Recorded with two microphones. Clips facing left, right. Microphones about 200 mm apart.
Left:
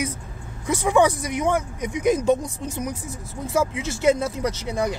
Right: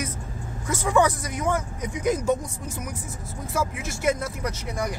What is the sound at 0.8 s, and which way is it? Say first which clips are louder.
Speech: left 3 dB; 20° left (ahead or behind).